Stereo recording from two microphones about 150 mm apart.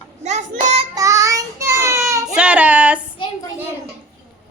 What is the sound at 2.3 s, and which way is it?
Speech, 5° right (ahead or behind).